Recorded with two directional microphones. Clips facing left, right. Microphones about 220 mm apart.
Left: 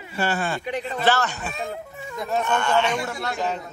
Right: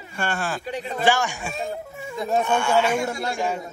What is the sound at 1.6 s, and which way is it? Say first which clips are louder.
A man's voice: right 2 dB; centre (ahead or behind).